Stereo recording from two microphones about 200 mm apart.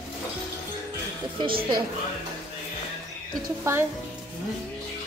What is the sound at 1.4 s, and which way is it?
Speech, 25° right (ahead or behind).